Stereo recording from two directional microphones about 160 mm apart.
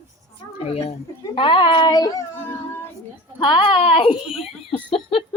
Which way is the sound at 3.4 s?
30° left (ahead or behind).